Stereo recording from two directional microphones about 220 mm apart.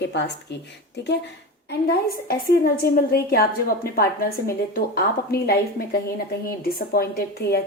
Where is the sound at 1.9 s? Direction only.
45° left (ahead or behind).